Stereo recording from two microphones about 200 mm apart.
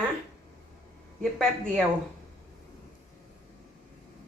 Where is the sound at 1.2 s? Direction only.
Centre (ahead or behind).